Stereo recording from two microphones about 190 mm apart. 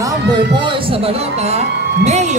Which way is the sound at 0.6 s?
30° right (ahead or behind).